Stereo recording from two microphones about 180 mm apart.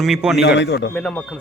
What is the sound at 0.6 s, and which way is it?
Speech, 75° left (ahead or behind).